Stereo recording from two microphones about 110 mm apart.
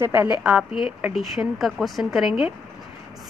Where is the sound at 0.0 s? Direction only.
20° right (ahead or behind).